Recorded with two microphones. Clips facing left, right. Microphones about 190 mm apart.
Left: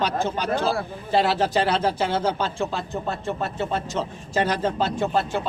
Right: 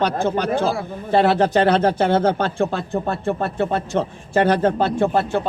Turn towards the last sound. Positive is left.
turn(degrees=-55)  # may be behind; listen again after turning